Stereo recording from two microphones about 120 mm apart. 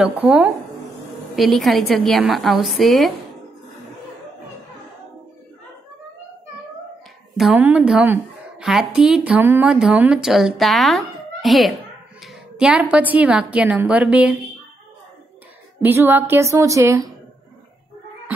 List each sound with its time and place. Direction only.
0.0 s a woman's voice: 10° right (ahead or behind)
1.3 s a woman's voice: centre (ahead or behind)
7.5 s a woman's voice: 10° right (ahead or behind)
15.8 s a woman's voice: 15° right (ahead or behind)